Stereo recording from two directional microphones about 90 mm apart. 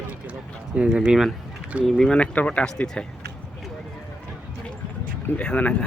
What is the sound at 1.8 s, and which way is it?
Speech, 5° left (ahead or behind).